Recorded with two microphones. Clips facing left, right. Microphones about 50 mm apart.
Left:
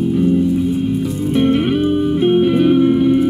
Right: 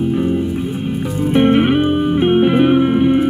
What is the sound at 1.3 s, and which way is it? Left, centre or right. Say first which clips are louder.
Music: right 3 dB; right.